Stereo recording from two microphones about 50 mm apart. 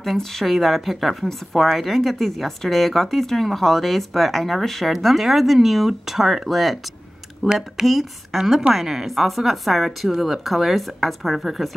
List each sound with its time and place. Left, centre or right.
0.0 s a woman's voice: centre